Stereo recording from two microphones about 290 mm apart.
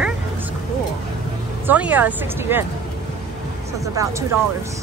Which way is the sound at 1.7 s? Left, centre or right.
Centre.